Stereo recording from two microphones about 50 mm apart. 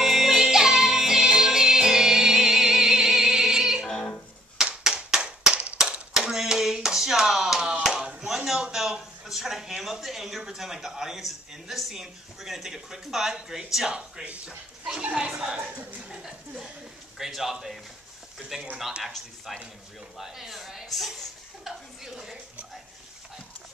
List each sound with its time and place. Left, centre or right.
0.0 s music: centre
3.9 s music: centre
4.6 s clapping: centre
5.8 s hands: centre
7.8 s a sound: centre
14.2 s speech: right
16.2 s chuckle: centre
17.2 s a man's voice: centre